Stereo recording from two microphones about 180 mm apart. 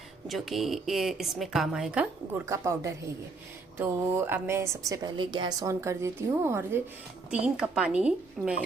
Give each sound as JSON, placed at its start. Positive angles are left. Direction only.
{"t": 0.3, "sound": "speech", "side_deg": 0}
{"t": 2.5, "sound": "a woman's voice", "side_deg": -15}